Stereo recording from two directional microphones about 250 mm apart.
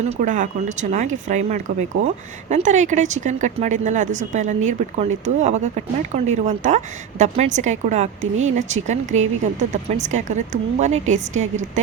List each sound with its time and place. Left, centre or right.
0.0 s speech: right